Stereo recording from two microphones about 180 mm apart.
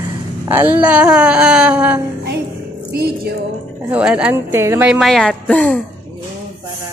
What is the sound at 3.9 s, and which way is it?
Speech, 5° right (ahead or behind).